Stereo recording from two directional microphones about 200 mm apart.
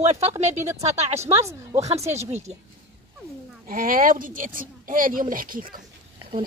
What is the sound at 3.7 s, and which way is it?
Speech, 45° right (ahead or behind).